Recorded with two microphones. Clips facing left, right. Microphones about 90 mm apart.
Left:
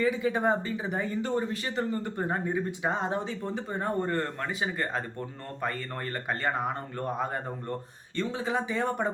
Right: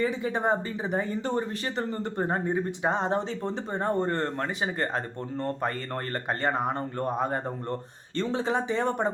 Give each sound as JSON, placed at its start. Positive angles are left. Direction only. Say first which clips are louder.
{"t": 0.0, "sound": "speech", "louder": "left 1 dB", "side_deg": -35}
{"t": 6.4, "sound": "speech", "louder": "right 3 dB", "side_deg": -35}